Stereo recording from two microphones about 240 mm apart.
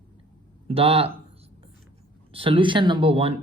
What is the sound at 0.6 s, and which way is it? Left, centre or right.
Speech, right.